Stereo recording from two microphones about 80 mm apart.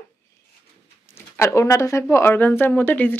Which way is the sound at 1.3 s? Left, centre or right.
Left.